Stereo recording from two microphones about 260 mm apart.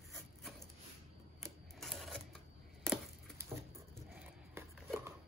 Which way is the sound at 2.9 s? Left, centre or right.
Centre.